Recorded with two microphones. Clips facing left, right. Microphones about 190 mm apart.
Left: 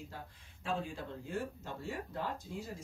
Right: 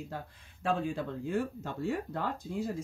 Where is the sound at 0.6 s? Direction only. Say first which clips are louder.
Right 7 dB; 65° right (ahead or behind).